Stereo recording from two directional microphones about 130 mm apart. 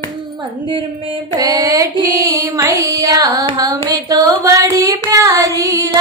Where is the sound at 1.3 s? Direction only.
30° right (ahead or behind).